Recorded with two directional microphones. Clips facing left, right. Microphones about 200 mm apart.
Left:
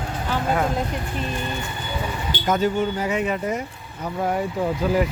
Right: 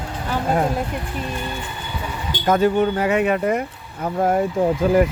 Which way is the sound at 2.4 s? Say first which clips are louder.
Right 5 dB; 60° right (ahead or behind).